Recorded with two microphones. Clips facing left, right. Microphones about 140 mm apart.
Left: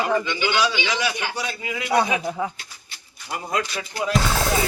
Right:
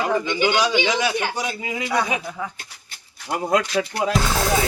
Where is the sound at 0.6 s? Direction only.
50° right (ahead or behind).